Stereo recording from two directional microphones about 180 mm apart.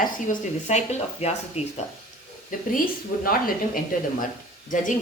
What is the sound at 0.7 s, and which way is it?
Speech, 35° left (ahead or behind).